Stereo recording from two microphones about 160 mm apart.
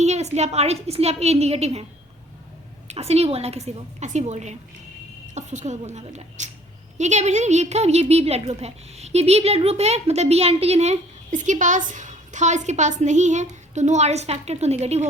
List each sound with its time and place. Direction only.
0.0 s a woman's voice: 45° right (ahead or behind)
2.8 s a woman's voice: 40° right (ahead or behind)